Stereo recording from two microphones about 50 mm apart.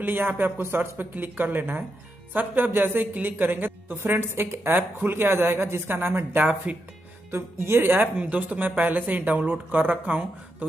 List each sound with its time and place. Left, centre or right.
0.0 s a woman's voice: right
6.4 s speech: right
7.2 s a woman's voice: right
8.2 s speech: right